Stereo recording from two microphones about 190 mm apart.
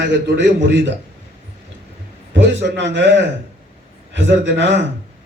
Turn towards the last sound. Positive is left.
turn(degrees=-65)  # may be behind; listen again after turning